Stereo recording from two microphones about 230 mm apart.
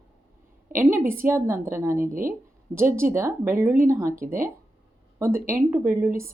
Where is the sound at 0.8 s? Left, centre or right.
Centre.